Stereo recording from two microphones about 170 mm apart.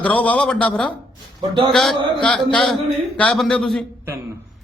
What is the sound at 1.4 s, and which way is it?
Speech, 25° right (ahead or behind).